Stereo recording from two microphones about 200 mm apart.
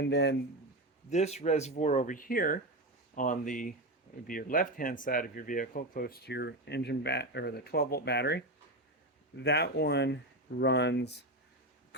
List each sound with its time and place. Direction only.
0.0 s speech: 60° left (ahead or behind)
1.1 s speech: 35° left (ahead or behind); by 11.1 s 60° left (ahead or behind)